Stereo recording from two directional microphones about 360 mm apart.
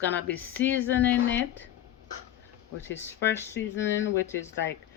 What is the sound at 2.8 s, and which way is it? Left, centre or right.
Speech, centre.